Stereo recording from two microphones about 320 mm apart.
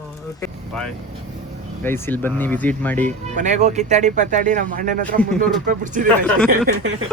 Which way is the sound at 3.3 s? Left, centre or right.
Right.